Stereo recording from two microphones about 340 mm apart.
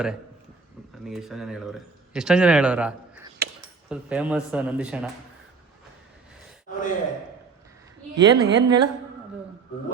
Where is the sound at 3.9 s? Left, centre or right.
Centre.